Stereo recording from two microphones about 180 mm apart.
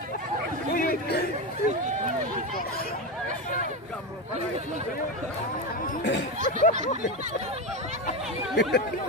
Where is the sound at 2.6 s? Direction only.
55° left (ahead or behind).